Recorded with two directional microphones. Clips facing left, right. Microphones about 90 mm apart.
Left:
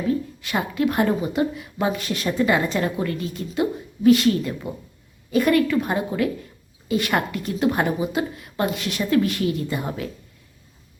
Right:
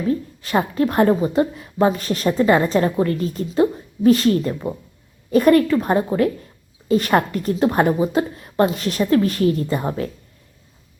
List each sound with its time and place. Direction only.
0.1 s a woman's voice: 35° right (ahead or behind)